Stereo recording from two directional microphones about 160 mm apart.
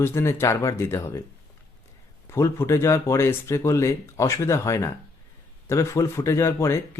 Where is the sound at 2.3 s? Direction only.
15° left (ahead or behind).